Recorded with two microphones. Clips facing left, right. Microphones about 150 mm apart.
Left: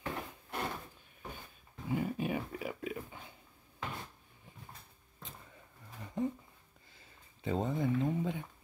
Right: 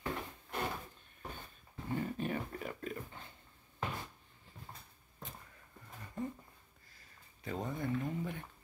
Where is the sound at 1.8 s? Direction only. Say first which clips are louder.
Left 3 dB; 10° left (ahead or behind).